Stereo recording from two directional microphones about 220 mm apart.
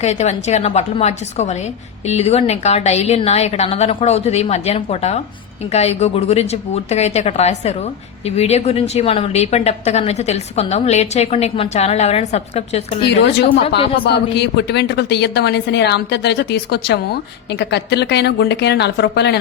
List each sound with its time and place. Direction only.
0.0 s a woman's voice: 30° left (ahead or behind)
13.1 s a woman's voice: 50° left (ahead or behind)